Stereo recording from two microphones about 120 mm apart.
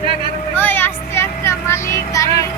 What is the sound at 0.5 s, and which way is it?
Vehicle, 15° left (ahead or behind).